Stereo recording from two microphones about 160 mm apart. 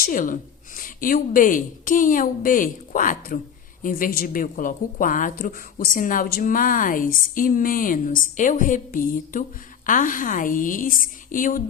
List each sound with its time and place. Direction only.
0.0 s a woman's voice: 55° left (ahead or behind)